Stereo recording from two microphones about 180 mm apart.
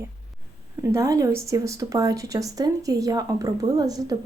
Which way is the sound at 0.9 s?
20° right (ahead or behind).